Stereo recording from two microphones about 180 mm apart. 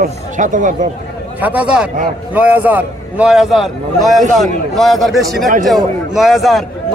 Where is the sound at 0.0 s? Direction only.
45° right (ahead or behind).